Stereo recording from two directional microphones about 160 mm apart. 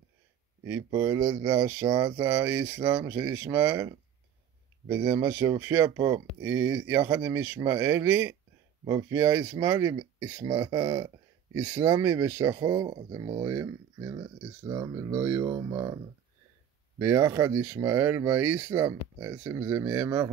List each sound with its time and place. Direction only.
0.8 s speech: 25° right (ahead or behind)
17.0 s speech: 20° right (ahead or behind)